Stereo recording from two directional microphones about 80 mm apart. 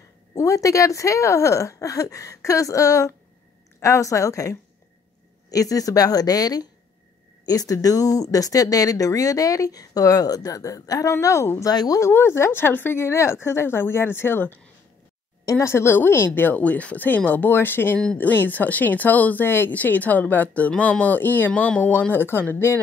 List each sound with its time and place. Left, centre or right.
0.3 s speech: left
11.7 s speech: left
12.0 s a woman's voice: left